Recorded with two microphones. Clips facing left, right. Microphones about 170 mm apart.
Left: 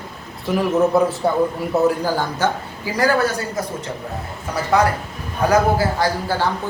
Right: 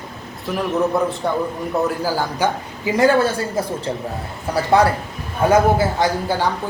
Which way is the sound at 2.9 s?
25° right (ahead or behind).